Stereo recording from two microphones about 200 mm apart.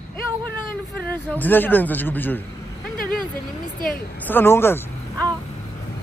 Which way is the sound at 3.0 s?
45° left (ahead or behind).